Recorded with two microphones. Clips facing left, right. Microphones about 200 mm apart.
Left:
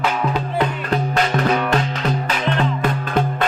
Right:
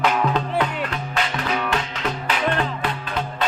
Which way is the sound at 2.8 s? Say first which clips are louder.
Left 6 dB; 50° left (ahead or behind).